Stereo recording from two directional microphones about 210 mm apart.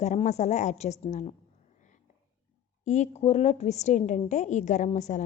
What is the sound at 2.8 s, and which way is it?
A woman's voice, 35° left (ahead or behind).